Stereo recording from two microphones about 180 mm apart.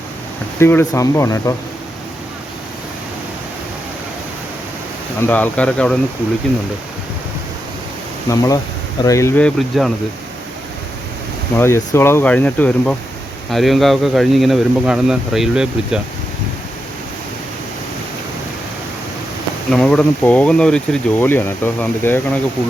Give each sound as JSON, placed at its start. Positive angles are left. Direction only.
{"t": 0.6, "sound": "speech", "side_deg": 15}
{"t": 5.2, "sound": "speech", "side_deg": 10}
{"t": 8.3, "sound": "speech", "side_deg": 20}
{"t": 11.5, "sound": "speech", "side_deg": 15}
{"t": 19.7, "sound": "speech", "side_deg": 5}